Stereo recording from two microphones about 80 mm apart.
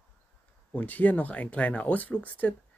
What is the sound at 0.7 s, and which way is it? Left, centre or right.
Speech, left.